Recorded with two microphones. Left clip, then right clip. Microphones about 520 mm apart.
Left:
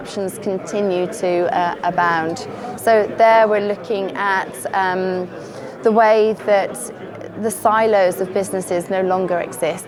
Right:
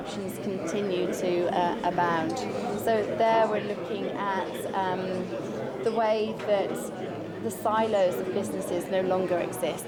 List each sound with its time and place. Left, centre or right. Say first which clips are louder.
0.7 s a woman's voice: left 8 dB; left